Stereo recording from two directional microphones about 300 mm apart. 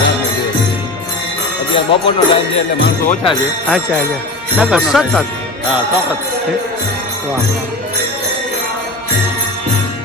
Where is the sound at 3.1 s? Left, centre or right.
Centre.